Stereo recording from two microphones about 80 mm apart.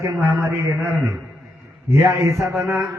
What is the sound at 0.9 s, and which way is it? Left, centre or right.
Speech, centre.